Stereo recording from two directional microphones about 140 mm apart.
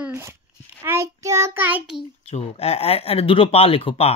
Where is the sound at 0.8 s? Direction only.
20° right (ahead or behind).